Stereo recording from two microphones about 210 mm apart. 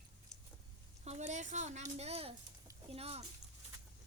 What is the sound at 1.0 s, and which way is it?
A woman's voice, 30° right (ahead or behind).